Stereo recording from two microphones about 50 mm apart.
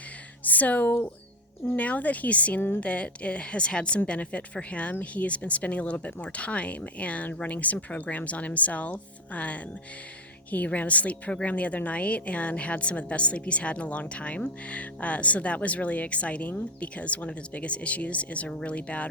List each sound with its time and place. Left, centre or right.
0.4 s a sound: left
1.6 s speech: left
2.6 s speech: left
2.8 s speech: left